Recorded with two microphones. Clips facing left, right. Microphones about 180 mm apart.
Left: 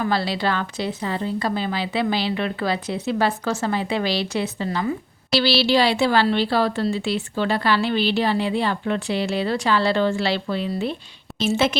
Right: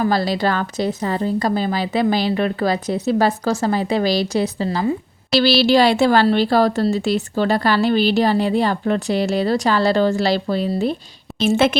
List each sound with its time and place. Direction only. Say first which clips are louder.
0.0 s a woman's voice: right 4 dB; 40° right (ahead or behind)
11.3 s a woman's voice: right 4 dB; 55° right (ahead or behind)